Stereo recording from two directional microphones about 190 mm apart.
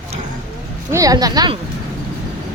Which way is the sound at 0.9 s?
20° right (ahead or behind).